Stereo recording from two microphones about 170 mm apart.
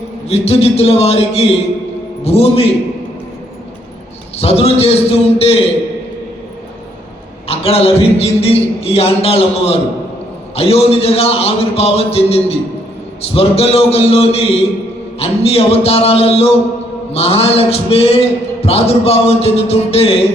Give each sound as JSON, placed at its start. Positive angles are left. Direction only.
{"t": 0.3, "sound": "a man's voice", "side_deg": 35}
{"t": 4.4, "sound": "a man's voice", "side_deg": 35}
{"t": 7.4, "sound": "a man's voice", "side_deg": 35}